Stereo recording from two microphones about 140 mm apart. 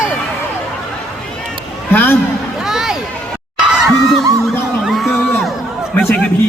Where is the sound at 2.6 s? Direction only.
5° right (ahead or behind).